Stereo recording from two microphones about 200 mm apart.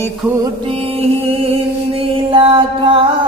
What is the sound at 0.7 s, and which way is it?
Music, 30° right (ahead or behind).